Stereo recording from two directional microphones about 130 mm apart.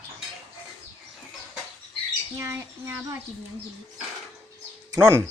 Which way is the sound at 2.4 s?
20° right (ahead or behind).